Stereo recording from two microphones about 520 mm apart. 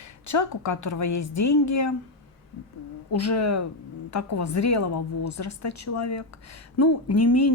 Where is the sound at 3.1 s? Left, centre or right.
Left.